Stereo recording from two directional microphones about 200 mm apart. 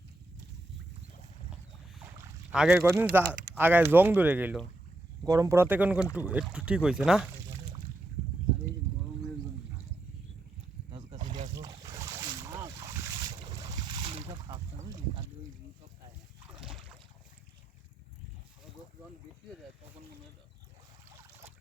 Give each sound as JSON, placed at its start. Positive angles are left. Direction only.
{"t": 2.5, "sound": "speech", "side_deg": -5}
{"t": 11.2, "sound": "boat", "side_deg": -35}
{"t": 11.5, "sound": "boat", "side_deg": -20}
{"t": 16.6, "sound": "boat", "side_deg": -5}